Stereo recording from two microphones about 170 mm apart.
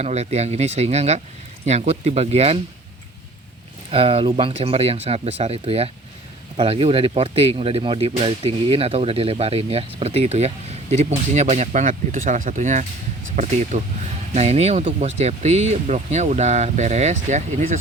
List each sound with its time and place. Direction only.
0.0 s speech: 40° right (ahead or behind)
3.9 s speech: 35° right (ahead or behind)